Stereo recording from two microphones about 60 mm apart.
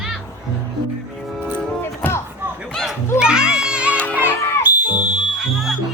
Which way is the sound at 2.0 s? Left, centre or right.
Left.